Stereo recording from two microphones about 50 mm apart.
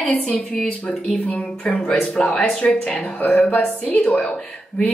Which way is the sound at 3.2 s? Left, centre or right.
Left.